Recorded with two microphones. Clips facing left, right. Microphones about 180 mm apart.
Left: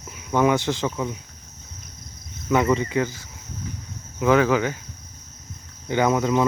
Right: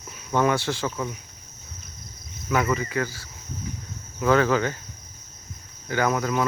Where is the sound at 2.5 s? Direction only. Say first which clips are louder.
Left 4 dB; 25° left (ahead or behind).